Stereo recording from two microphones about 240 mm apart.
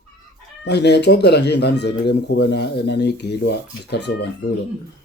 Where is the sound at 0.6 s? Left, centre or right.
Left.